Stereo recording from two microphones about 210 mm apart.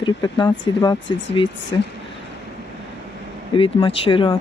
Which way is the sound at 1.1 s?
60° left (ahead or behind).